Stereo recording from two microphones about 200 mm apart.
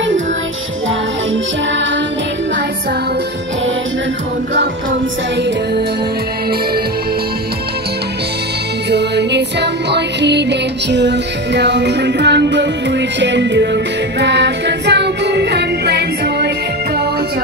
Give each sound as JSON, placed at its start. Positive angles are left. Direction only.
{"t": 8.9, "sound": "music", "side_deg": -60}